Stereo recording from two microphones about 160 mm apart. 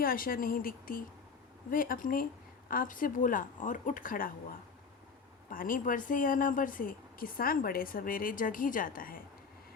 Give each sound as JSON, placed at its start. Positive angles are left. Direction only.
{"t": 0.0, "sound": "speech", "side_deg": 65}